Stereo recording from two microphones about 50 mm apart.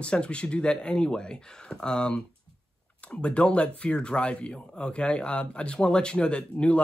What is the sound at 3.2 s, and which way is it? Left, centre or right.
Speech, left.